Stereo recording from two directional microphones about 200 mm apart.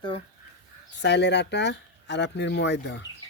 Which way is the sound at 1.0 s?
60° left (ahead or behind).